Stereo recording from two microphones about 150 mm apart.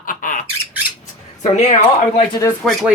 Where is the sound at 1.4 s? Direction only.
50° left (ahead or behind).